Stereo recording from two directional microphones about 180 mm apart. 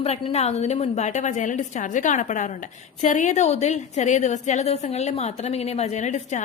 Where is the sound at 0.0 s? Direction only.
35° left (ahead or behind).